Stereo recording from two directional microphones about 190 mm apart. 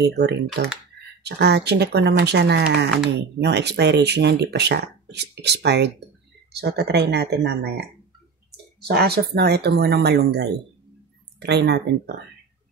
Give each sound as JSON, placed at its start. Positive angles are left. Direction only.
{"t": 0.2, "sound": "speech", "side_deg": -60}